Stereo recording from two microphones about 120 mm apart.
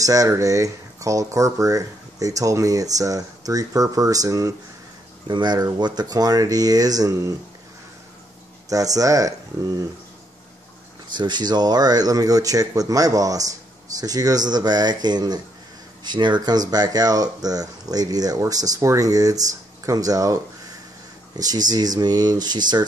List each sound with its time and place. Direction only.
0.0 s speech: 30° right (ahead or behind)
8.6 s speech: 30° right (ahead or behind)
11.1 s speech: 40° right (ahead or behind)